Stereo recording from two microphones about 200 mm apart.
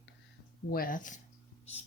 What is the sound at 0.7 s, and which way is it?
Speech, 45° left (ahead or behind).